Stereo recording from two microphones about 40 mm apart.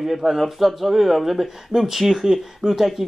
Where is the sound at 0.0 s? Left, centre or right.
Centre.